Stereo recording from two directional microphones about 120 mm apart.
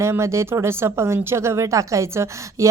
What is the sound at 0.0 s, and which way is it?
Speech, 25° right (ahead or behind).